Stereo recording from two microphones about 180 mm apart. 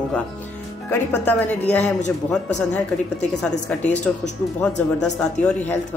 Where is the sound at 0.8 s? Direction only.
10° left (ahead or behind).